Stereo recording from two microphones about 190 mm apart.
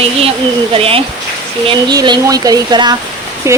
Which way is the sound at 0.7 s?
30° right (ahead or behind).